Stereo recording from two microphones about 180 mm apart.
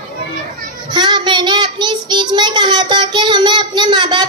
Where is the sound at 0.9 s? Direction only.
25° right (ahead or behind).